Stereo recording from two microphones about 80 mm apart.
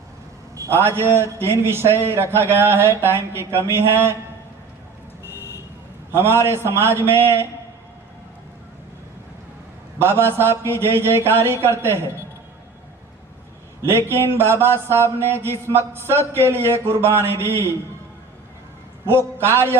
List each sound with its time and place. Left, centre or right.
0.5 s a sound: right
0.8 s a man's voice: right
6.1 s a man's voice: right
10.0 s a man's voice: right
13.8 s a man's voice: right
19.0 s a man's voice: right